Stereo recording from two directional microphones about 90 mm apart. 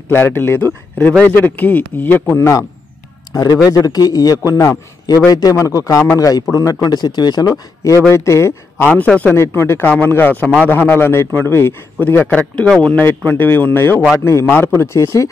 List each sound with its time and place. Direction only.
0.1 s a man's voice: 25° left (ahead or behind)
3.6 s a man's voice: 45° left (ahead or behind)
8.1 s a man's voice: 30° left (ahead or behind)
8.8 s speech: 15° left (ahead or behind)
9.3 s a man's voice: 25° left (ahead or behind)
12.2 s a man's voice: 15° left (ahead or behind); by 15.2 s 30° left (ahead or behind)